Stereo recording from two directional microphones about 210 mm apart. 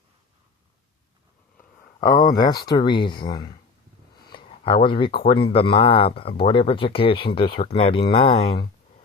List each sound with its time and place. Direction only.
2.0 s speech: 20° left (ahead or behind)